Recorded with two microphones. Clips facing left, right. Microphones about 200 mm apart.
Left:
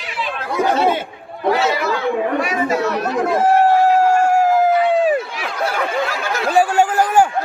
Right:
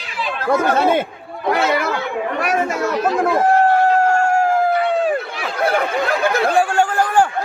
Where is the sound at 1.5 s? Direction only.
55° right (ahead or behind).